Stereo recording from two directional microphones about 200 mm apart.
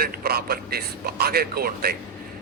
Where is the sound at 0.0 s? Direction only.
50° right (ahead or behind).